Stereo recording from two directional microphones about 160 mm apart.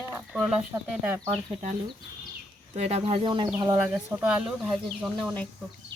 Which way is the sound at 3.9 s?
10° right (ahead or behind).